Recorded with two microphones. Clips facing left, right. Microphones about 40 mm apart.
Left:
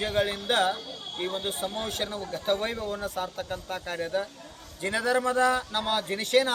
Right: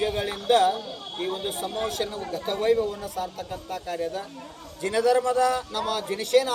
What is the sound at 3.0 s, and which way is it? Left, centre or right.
Speech, left.